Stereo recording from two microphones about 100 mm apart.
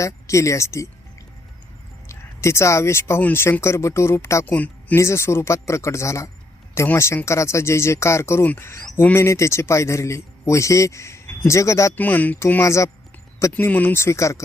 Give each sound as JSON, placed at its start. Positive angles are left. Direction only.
{"t": 0.0, "sound": "speech", "side_deg": 30}
{"t": 2.0, "sound": "a man's voice", "side_deg": 30}
{"t": 4.4, "sound": "speech", "side_deg": 15}
{"t": 4.9, "sound": "a man's voice", "side_deg": 25}
{"t": 11.9, "sound": "a man's voice", "side_deg": 15}
{"t": 13.5, "sound": "a man's voice", "side_deg": 15}